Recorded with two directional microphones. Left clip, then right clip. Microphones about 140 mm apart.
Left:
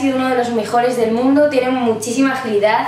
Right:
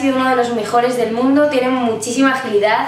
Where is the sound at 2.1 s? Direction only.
Centre (ahead or behind).